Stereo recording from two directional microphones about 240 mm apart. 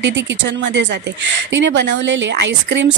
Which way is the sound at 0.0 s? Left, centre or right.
Right.